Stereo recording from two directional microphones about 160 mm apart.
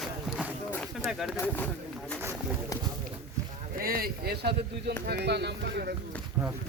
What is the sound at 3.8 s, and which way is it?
Speech, 65° right (ahead or behind).